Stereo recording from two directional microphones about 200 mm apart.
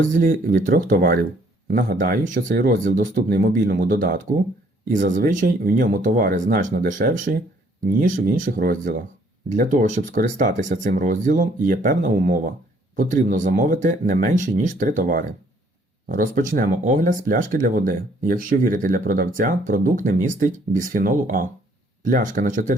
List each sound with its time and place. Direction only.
0.1 s speech: 45° right (ahead or behind)